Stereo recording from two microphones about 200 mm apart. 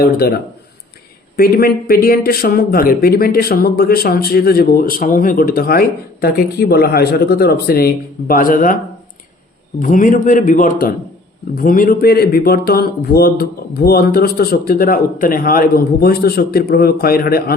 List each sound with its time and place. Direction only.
0.0 s speech: 50° left (ahead or behind)
9.8 s a man's voice: 40° left (ahead or behind)